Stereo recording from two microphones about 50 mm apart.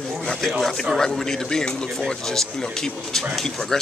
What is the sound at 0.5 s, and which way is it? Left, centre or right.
Speech, centre.